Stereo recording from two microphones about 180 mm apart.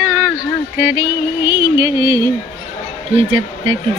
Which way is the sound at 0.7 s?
15° right (ahead or behind).